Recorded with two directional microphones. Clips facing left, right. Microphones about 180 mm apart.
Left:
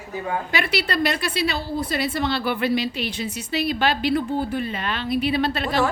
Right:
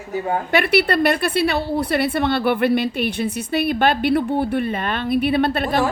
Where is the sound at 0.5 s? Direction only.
55° right (ahead or behind).